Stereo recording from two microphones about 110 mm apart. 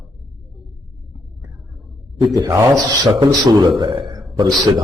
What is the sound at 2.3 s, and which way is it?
Speech, 30° right (ahead or behind).